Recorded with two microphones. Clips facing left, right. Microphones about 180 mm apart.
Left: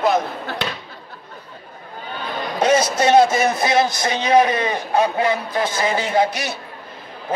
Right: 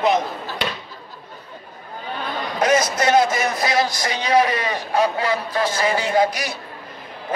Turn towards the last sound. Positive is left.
turn(degrees=25)  # may be behind; listen again after turning